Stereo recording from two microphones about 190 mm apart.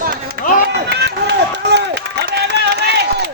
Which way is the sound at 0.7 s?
60° right (ahead or behind).